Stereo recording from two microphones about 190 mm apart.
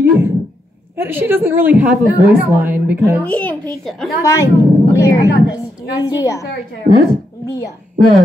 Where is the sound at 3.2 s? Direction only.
5° left (ahead or behind).